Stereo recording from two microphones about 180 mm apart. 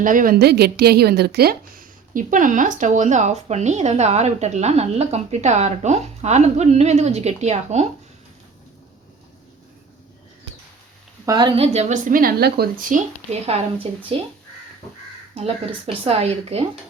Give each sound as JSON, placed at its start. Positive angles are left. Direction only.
{"t": 0.0, "sound": "a woman's voice", "side_deg": -45}
{"t": 11.3, "sound": "a woman's voice", "side_deg": -25}
{"t": 13.4, "sound": "a woman's voice", "side_deg": -30}
{"t": 15.9, "sound": "a woman's voice", "side_deg": -35}